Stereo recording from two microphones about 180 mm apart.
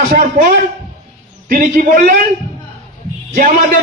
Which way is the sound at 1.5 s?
50° right (ahead or behind).